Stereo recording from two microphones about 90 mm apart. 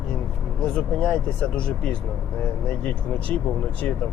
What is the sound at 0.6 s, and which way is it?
Speech, 10° left (ahead or behind).